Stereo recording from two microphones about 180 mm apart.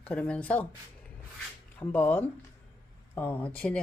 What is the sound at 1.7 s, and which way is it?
Speech, 10° left (ahead or behind).